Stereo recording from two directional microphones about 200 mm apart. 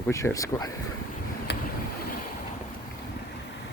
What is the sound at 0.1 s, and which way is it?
Speech, 15° left (ahead or behind).